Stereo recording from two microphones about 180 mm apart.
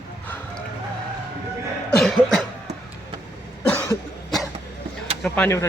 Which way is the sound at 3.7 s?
10° left (ahead or behind).